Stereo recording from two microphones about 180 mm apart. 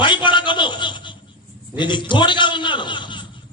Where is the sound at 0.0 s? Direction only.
25° left (ahead or behind).